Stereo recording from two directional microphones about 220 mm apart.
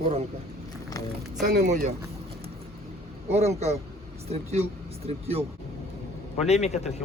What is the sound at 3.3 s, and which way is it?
Speech, 30° right (ahead or behind).